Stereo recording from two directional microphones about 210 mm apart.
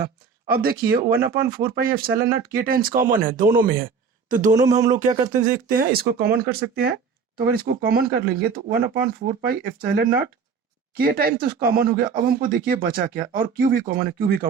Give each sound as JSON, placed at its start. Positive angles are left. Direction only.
{"t": 0.5, "sound": "speech", "side_deg": -45}
{"t": 4.3, "sound": "a sound", "side_deg": -35}
{"t": 5.2, "sound": "speech", "side_deg": -20}
{"t": 5.6, "sound": "speech", "side_deg": -45}